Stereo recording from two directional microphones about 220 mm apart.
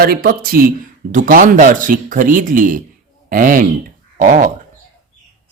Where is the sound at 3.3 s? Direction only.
40° right (ahead or behind).